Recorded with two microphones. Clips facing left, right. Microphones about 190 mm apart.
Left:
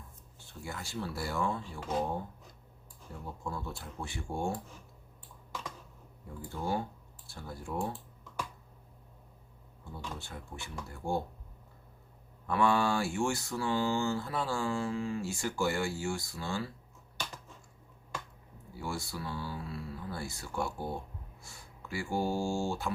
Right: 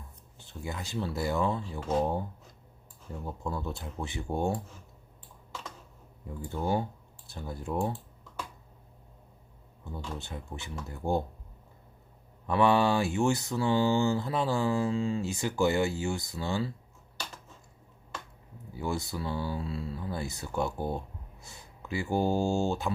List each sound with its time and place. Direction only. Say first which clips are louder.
0.3 s speech: right 4 dB; 20° right (ahead or behind)
3.1 s speech: right 4 dB; 20° right (ahead or behind)
6.5 s speech: right 4 dB; 20° right (ahead or behind)
10.2 s speech: right 4 dB; 20° right (ahead or behind)
12.5 s speech: right 4 dB; 20° right (ahead or behind)
18.7 s speech: right 5 dB; 20° right (ahead or behind)